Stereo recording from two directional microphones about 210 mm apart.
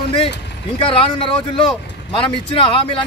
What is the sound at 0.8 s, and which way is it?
Speech, 25° left (ahead or behind).